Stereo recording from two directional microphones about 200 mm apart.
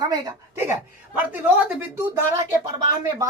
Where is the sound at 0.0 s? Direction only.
20° right (ahead or behind).